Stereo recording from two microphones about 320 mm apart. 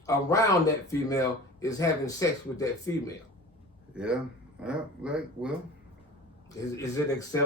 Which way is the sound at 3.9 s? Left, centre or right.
Centre.